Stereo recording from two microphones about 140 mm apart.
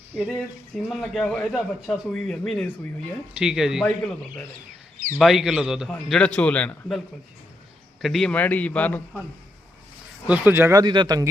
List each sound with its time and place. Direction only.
0.2 s a man's voice: centre (ahead or behind)
3.3 s a man's voice: 5° right (ahead or behind)
5.9 s a man's voice: 5° left (ahead or behind)
8.0 s a man's voice: centre (ahead or behind)
10.2 s speech: 10° right (ahead or behind); by 11.3 s 30° right (ahead or behind)